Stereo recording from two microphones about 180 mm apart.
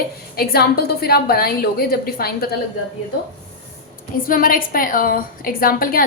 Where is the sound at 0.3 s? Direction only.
60° left (ahead or behind).